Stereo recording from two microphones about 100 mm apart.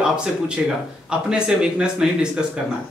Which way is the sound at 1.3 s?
10° right (ahead or behind).